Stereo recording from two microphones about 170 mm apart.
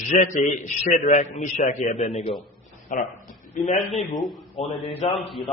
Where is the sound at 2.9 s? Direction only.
50° left (ahead or behind).